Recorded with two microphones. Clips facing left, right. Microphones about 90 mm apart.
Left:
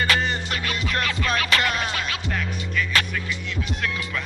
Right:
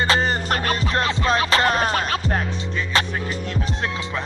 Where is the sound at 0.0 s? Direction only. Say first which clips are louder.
Right 3 dB; 35° right (ahead or behind).